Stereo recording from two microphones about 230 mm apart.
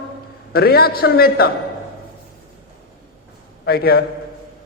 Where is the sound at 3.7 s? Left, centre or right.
Left.